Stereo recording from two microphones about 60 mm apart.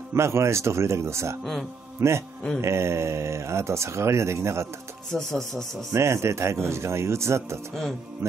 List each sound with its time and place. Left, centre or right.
0.1 s speech: right
1.4 s speech: centre
2.0 s a man's voice: right
5.1 s speech: centre
5.9 s speech: right
8.2 s mantra: right